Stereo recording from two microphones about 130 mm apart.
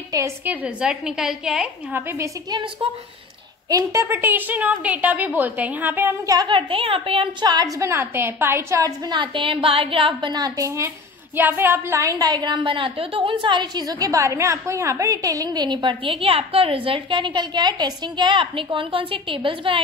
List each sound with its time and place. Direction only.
0.1 s a woman's voice: 25° right (ahead or behind)
0.5 s a woman's voice: 10° right (ahead or behind)
2.5 s a woman's voice: 40° right (ahead or behind)
3.6 s a woman's voice: 25° right (ahead or behind)
11.3 s a woman's voice: 15° right (ahead or behind); by 19.8 s 40° right (ahead or behind)